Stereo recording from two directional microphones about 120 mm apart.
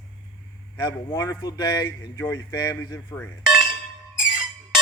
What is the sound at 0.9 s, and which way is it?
Speech, 30° left (ahead or behind).